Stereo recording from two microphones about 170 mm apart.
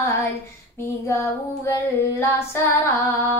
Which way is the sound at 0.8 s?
15° left (ahead or behind).